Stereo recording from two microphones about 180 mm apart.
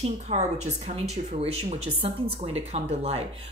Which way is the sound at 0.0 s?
40° right (ahead or behind).